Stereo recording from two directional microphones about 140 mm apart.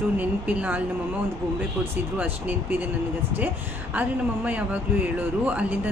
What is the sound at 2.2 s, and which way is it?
Speech, 15° right (ahead or behind).